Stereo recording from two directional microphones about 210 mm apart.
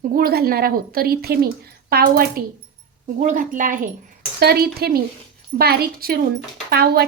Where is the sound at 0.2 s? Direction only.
45° right (ahead or behind).